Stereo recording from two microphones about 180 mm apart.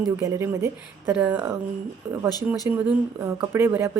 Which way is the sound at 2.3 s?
20° left (ahead or behind).